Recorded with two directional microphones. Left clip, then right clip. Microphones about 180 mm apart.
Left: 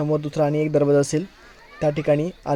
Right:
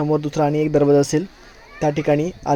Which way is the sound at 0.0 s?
5° left (ahead or behind).